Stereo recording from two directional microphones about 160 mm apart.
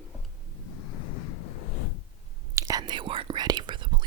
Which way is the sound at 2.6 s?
20° right (ahead or behind).